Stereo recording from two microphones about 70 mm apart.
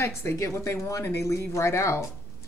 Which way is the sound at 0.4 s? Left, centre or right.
Left.